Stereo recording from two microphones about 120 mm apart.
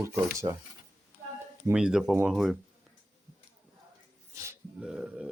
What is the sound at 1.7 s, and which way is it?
Burping, 5° right (ahead or behind).